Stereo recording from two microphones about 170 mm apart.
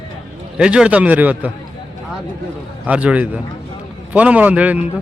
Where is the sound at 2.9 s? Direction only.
5° right (ahead or behind).